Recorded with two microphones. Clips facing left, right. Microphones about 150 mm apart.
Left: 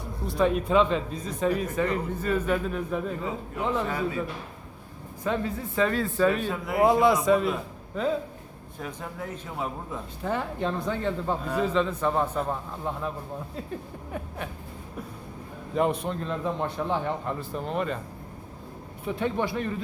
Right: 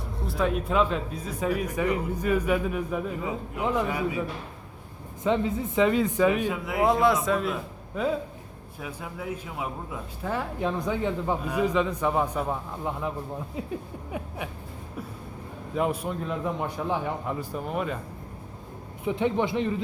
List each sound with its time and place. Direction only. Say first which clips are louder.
0.0 s a man's voice: left 3 dB; centre (ahead or behind)
5.2 s a man's voice: right 3 dB; 20° right (ahead or behind)
6.7 s a man's voice: left 2 dB; centre (ahead or behind)
14.1 s a man's voice: right 1 dB; 10° right (ahead or behind)
15.7 s a man's voice: left 2 dB; 5° right (ahead or behind)
19.0 s speech: right 2 dB; 20° right (ahead or behind)